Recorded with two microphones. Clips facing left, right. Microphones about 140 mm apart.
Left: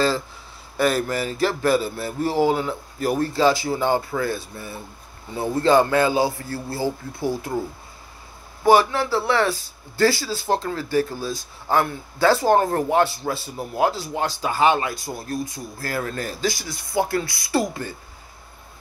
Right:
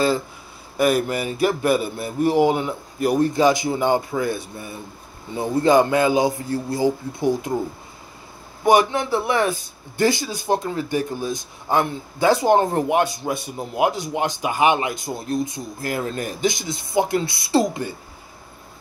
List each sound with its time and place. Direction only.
0.7 s speech: 15° right (ahead or behind)
8.6 s speech: 20° right (ahead or behind)